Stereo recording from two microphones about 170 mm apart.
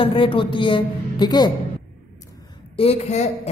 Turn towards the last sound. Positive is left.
turn(degrees=40)  # may be behind; listen again after turning